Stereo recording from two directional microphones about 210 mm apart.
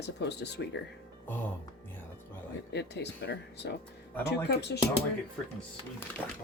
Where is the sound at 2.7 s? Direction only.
55° left (ahead or behind).